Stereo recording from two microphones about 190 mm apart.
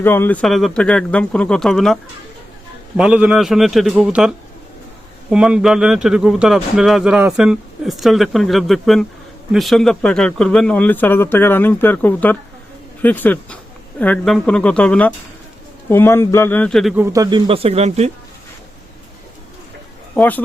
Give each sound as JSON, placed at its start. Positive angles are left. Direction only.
{"t": 0.0, "sound": "speech", "side_deg": 10}
{"t": 3.0, "sound": "speech", "side_deg": -5}
{"t": 16.9, "sound": "speech", "side_deg": -15}
{"t": 20.1, "sound": "speech", "side_deg": 10}